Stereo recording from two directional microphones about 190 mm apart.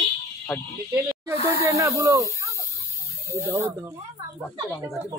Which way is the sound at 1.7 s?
15° right (ahead or behind).